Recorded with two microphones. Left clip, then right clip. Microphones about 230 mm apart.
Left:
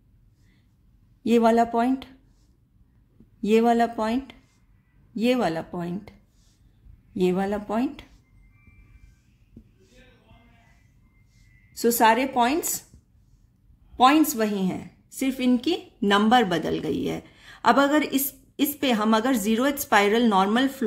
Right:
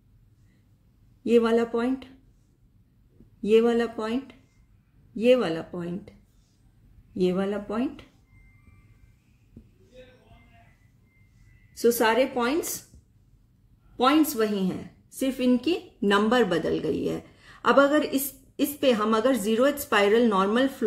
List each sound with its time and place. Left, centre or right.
1.3 s a woman's voice: left
3.4 s a woman's voice: left
7.2 s a woman's voice: left
11.8 s a woman's voice: left
13.9 s a woman's voice: left